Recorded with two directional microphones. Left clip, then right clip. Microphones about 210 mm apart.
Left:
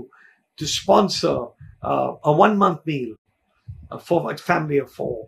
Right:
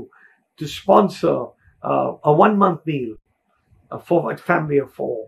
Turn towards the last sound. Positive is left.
turn(degrees=5)  # may be behind; listen again after turning